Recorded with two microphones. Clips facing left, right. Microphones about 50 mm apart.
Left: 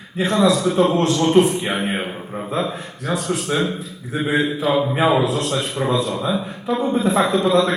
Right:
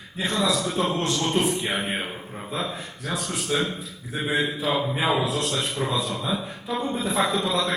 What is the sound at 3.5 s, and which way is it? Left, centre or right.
Speech, left.